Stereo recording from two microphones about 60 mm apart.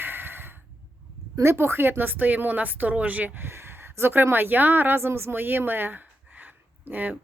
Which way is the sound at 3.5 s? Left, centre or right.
Right.